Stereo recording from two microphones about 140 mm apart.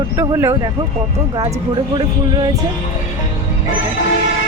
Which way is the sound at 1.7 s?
30° right (ahead or behind).